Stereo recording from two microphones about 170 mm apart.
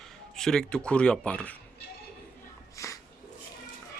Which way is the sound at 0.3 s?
5° left (ahead or behind).